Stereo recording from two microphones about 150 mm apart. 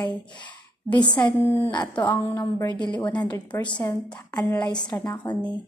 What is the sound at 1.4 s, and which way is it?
Speech, 15° right (ahead or behind).